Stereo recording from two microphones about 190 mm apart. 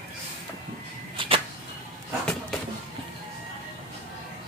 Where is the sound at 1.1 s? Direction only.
25° right (ahead or behind).